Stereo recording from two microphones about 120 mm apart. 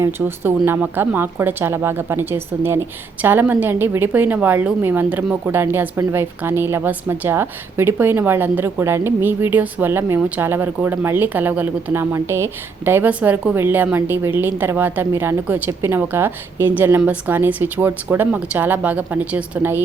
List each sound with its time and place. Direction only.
0.0 s speech: 20° right (ahead or behind)